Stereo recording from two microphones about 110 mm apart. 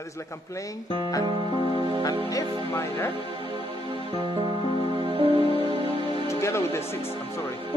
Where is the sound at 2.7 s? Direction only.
25° left (ahead or behind).